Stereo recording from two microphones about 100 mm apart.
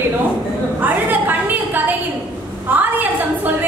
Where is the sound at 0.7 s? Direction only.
15° right (ahead or behind).